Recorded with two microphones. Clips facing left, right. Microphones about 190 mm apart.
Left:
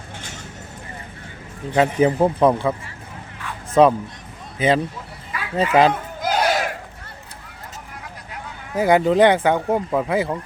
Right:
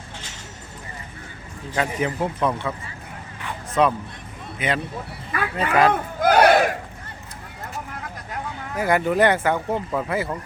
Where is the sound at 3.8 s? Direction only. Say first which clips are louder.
Left 6 dB; 35° left (ahead or behind).